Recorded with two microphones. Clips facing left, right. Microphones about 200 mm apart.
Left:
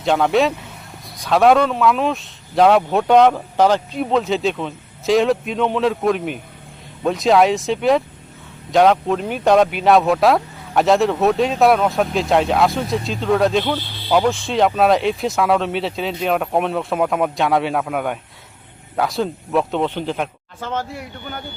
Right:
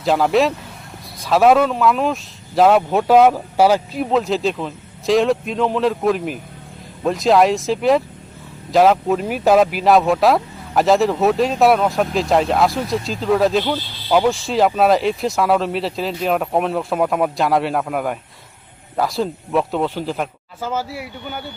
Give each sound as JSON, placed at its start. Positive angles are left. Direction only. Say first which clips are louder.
{"t": 0.0, "sound": "speech", "louder": "even", "side_deg": 0}